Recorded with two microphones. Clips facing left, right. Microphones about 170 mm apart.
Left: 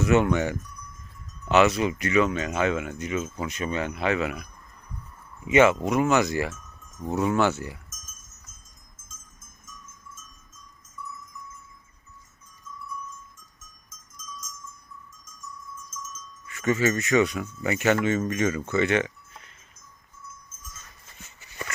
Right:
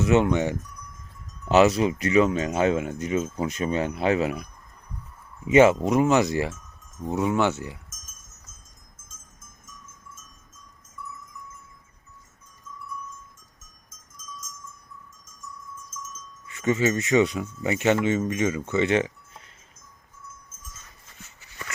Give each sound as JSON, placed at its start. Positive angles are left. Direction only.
{"t": 0.0, "sound": "speech", "side_deg": -25}
{"t": 5.5, "sound": "speech", "side_deg": -35}
{"t": 16.5, "sound": "speech", "side_deg": -25}